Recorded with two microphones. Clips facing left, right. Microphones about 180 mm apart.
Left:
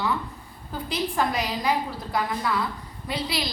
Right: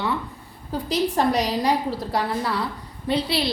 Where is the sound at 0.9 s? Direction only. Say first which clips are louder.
Right 5 dB; 35° right (ahead or behind).